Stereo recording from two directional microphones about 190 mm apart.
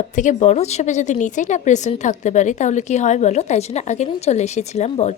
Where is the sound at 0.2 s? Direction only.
40° left (ahead or behind).